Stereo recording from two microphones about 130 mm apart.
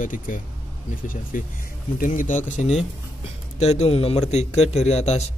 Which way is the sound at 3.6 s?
55° left (ahead or behind).